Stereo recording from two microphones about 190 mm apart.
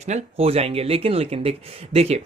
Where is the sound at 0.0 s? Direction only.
35° right (ahead or behind).